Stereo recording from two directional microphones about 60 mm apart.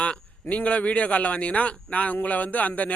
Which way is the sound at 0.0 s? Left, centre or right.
Left.